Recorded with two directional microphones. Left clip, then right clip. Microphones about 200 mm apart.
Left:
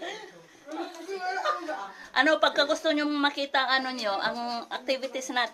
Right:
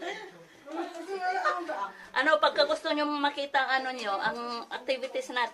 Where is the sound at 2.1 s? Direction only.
30° left (ahead or behind).